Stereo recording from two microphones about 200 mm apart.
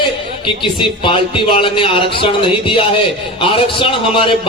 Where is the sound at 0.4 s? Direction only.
25° left (ahead or behind).